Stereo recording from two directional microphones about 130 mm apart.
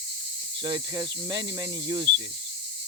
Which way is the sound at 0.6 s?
35° right (ahead or behind).